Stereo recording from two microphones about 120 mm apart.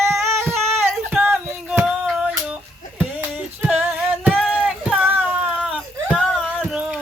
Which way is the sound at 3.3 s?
5° right (ahead or behind).